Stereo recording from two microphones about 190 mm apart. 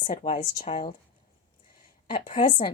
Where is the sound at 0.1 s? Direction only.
45° left (ahead or behind).